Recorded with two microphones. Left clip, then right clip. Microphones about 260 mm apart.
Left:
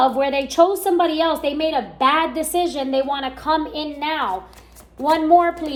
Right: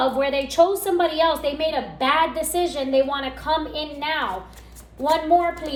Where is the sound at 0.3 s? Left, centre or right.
Left.